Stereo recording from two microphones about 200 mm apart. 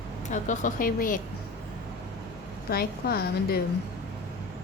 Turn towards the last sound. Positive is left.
turn(degrees=50)  # may be behind; listen again after turning